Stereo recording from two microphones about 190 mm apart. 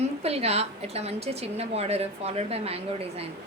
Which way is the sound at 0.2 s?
35° right (ahead or behind).